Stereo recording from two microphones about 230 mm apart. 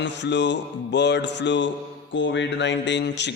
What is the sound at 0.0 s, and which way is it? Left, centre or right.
Mantra, left.